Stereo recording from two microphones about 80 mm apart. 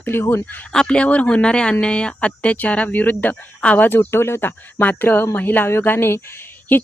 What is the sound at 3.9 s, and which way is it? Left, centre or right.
Speech, left.